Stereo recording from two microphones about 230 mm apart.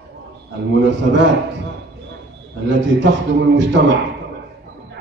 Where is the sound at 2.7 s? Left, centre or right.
Right.